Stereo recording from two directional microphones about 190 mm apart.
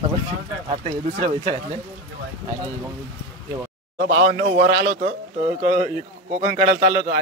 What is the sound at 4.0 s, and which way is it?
A man's voice, 55° right (ahead or behind).